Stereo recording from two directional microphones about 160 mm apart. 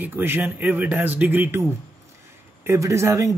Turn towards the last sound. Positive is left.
turn(degrees=-20)  # may be behind; listen again after turning